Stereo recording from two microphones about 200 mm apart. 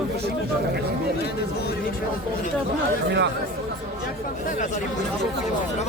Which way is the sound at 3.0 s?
60° right (ahead or behind).